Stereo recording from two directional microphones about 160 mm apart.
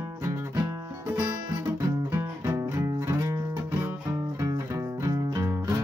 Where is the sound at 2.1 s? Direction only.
20° right (ahead or behind).